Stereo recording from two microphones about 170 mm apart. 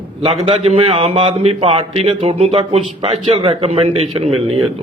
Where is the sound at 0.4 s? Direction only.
35° right (ahead or behind).